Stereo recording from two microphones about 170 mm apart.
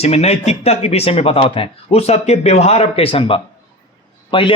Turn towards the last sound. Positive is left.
turn(degrees=30)  # may be behind; listen again after turning